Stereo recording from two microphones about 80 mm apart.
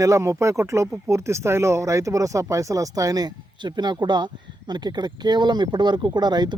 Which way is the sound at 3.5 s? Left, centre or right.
Right.